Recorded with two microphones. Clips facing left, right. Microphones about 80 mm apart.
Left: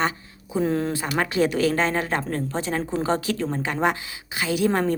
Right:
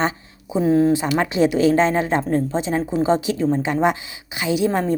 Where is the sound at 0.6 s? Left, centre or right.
Centre.